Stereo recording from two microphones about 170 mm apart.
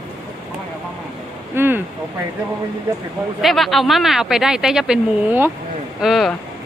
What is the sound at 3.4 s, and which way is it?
Speech, centre (ahead or behind).